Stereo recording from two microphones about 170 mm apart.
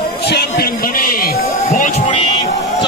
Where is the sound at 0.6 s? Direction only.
60° left (ahead or behind).